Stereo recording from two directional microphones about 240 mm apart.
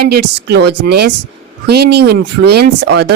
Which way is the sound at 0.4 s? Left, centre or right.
Right.